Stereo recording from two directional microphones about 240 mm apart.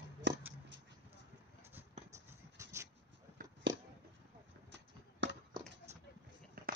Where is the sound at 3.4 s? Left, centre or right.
Right.